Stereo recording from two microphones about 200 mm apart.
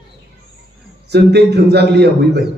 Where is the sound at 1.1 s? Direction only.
55° right (ahead or behind).